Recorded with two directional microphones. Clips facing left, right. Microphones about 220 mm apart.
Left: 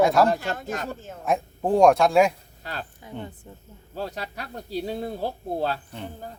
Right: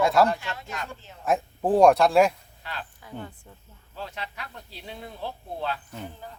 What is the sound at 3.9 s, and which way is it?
Speech, 40° left (ahead or behind).